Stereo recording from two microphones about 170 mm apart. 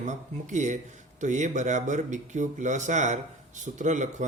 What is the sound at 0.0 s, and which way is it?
Speech, 45° right (ahead or behind).